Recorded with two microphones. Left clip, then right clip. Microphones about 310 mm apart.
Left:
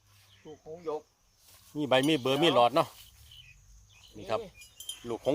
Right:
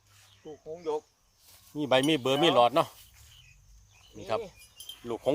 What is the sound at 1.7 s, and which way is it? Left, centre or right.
Speech, centre.